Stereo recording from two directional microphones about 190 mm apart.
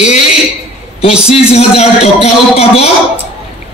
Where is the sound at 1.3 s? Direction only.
35° left (ahead or behind).